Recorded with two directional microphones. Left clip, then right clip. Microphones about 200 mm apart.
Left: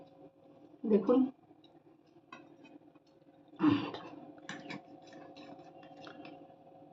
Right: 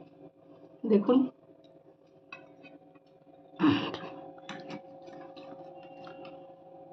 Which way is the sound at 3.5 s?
60° right (ahead or behind).